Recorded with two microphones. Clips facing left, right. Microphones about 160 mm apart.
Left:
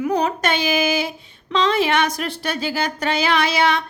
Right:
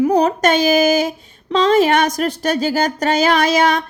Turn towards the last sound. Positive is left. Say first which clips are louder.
# right 4 dB
turn(degrees=-45)  # may be behind; listen again after turning